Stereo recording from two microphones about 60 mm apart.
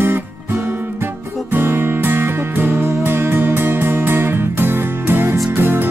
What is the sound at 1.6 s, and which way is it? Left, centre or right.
Music, right.